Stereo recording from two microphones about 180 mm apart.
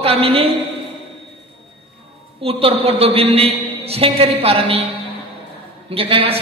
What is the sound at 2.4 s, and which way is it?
A man's voice, 30° right (ahead or behind).